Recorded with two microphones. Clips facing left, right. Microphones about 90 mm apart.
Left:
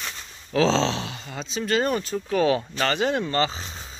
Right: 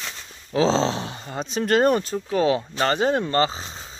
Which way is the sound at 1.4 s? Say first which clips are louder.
Right 5 dB; 55° right (ahead or behind).